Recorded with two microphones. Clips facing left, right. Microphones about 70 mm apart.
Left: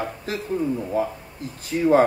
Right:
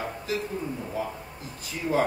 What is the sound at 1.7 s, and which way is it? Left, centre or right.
Speech, left.